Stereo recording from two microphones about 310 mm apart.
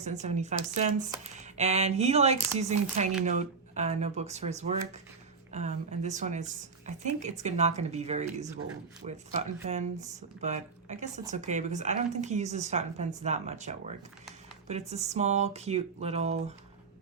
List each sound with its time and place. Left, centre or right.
0.0 s speech: right